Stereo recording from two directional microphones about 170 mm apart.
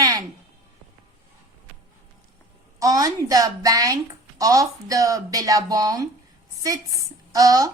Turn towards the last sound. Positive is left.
turn(degrees=-20)  # may be behind; listen again after turning